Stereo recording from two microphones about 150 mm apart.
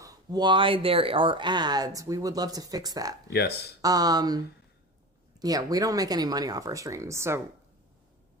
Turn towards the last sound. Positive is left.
turn(degrees=-20)  # may be behind; listen again after turning